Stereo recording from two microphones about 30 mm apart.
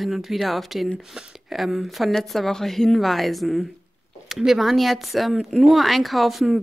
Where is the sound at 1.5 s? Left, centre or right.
Centre.